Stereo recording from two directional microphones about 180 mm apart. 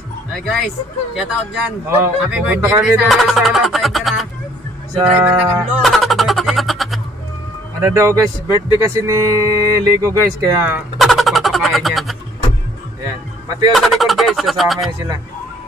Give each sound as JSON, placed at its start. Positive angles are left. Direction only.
{"t": 1.1, "sound": "speech", "side_deg": -5}
{"t": 7.8, "sound": "speech", "side_deg": -15}
{"t": 8.5, "sound": "speech", "side_deg": 20}
{"t": 8.7, "sound": "speech", "side_deg": -15}
{"t": 11.0, "sound": "music", "side_deg": 0}
{"t": 13.7, "sound": "speech", "side_deg": 0}